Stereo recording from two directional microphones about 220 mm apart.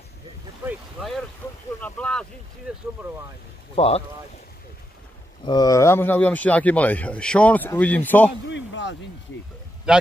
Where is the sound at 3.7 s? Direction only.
25° left (ahead or behind).